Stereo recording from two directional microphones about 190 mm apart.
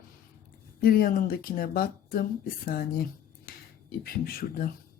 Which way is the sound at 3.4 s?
50° left (ahead or behind).